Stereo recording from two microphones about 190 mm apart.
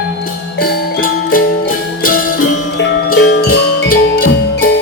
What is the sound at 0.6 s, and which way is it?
Music, 50° left (ahead or behind).